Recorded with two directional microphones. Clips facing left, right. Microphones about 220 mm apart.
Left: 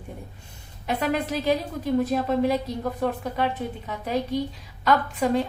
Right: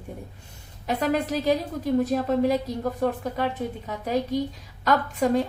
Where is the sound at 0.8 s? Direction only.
40° right (ahead or behind).